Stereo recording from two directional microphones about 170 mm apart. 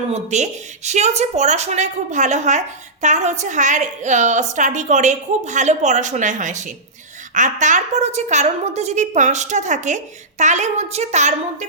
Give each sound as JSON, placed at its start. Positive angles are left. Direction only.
{"t": 0.1, "sound": "speech", "side_deg": -40}